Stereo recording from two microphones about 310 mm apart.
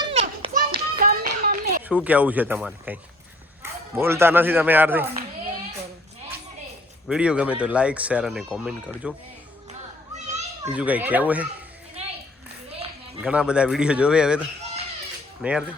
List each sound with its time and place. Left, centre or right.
0.0 s children playing: centre
0.9 s clapping: right
1.8 s speech: centre
7.1 s speech: centre
10.6 s speech: centre
13.2 s speech: centre